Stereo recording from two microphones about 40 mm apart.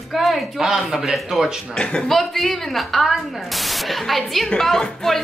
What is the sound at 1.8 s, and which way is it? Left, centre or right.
Speech, left.